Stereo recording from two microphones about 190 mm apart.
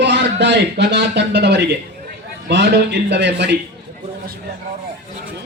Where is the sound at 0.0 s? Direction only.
65° right (ahead or behind).